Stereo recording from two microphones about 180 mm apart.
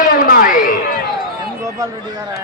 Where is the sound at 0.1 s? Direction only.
50° left (ahead or behind).